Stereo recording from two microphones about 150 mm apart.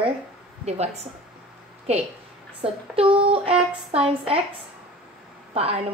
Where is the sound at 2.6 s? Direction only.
40° right (ahead or behind).